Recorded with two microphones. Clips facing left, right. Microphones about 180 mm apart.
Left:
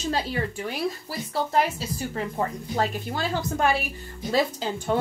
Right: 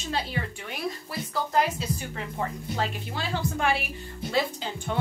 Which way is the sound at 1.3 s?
30° left (ahead or behind).